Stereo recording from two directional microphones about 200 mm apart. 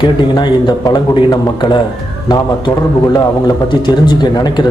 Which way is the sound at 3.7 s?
20° left (ahead or behind).